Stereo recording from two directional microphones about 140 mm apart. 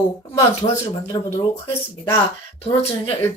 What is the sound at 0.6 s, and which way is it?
Speech, 40° left (ahead or behind).